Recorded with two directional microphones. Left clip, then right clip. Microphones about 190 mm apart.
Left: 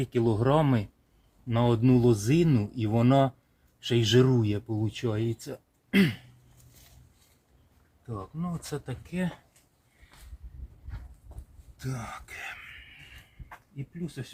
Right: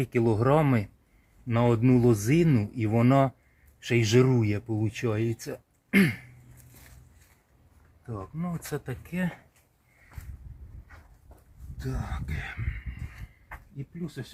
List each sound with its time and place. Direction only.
0.0 s speech: 25° right (ahead or behind)
8.0 s speech: 10° right (ahead or behind)
8.6 s speech: 20° right (ahead or behind)
11.8 s speech: 25° left (ahead or behind)